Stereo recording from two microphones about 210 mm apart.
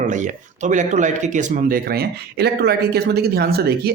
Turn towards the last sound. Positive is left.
turn(degrees=-50)  # may be behind; listen again after turning